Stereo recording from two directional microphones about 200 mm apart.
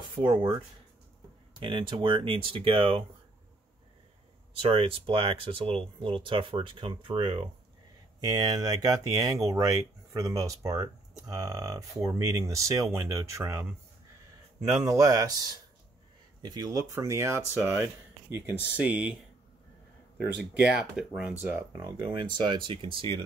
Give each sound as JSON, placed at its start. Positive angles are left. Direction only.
{"t": 0.1, "sound": "speech", "side_deg": -25}
{"t": 1.6, "sound": "speech", "side_deg": -25}
{"t": 4.6, "sound": "speech", "side_deg": -30}
{"t": 20.2, "sound": "speech", "side_deg": -5}